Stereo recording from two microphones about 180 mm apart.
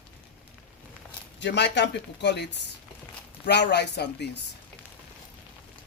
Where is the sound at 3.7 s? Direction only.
70° left (ahead or behind).